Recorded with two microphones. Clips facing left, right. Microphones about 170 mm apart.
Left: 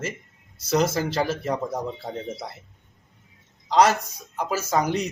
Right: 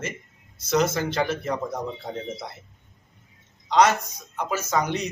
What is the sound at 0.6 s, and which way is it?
Speech, 35° left (ahead or behind).